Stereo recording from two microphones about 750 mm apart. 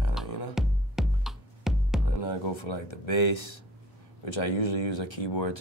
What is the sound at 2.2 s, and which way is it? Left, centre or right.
Speech, left.